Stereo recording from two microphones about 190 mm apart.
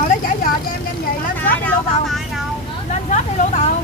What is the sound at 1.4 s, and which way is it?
Vehicle, 5° left (ahead or behind).